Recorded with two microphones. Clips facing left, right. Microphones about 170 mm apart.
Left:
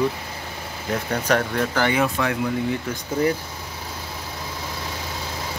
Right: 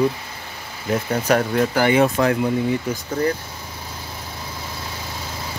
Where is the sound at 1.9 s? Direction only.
35° right (ahead or behind).